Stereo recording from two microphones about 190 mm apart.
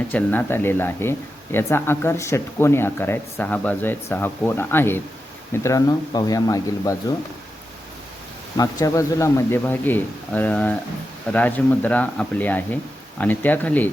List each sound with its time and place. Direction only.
0.1 s speech: 10° left (ahead or behind)
8.5 s speech: 15° left (ahead or behind)